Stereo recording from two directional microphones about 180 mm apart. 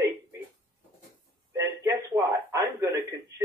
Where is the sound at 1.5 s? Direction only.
15° right (ahead or behind).